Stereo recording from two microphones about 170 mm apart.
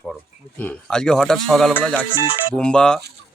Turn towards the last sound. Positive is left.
turn(degrees=5)  # may be behind; listen again after turning